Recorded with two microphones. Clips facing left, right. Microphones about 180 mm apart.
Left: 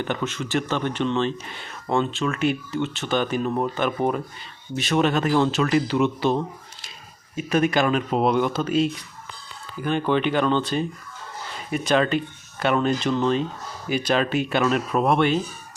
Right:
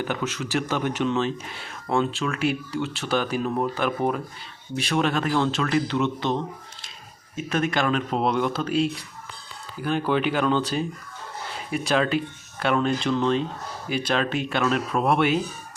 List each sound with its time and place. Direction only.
0.0 s speech: 5° right (ahead or behind)